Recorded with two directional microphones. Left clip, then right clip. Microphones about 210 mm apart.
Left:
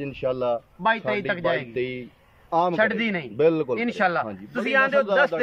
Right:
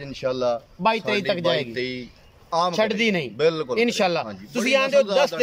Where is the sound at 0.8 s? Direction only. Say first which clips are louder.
Right 2 dB; 10° right (ahead or behind).